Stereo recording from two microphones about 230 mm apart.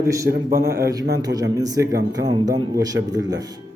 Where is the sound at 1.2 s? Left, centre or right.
Centre.